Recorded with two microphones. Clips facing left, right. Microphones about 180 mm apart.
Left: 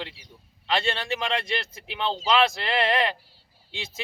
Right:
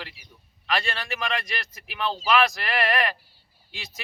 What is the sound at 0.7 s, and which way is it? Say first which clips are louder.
A man's voice: left 3 dB; 25° left (ahead or behind).